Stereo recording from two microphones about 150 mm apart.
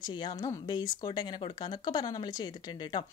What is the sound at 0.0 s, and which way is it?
Speech, 30° left (ahead or behind).